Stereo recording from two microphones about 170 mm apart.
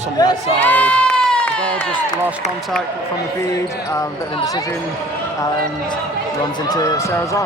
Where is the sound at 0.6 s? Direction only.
10° left (ahead or behind).